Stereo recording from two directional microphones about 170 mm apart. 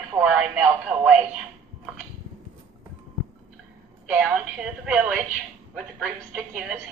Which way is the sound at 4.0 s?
5° right (ahead or behind).